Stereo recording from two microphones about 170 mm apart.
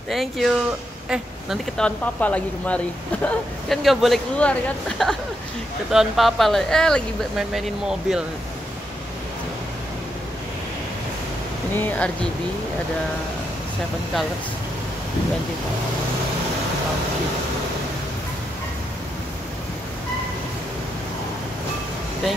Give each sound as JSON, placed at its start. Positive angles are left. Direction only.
{"t": 0.1, "sound": "speech", "side_deg": 0}
{"t": 11.7, "sound": "speech", "side_deg": 10}